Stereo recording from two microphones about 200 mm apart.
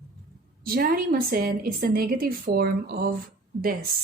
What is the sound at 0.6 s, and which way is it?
A woman's voice, 45° right (ahead or behind).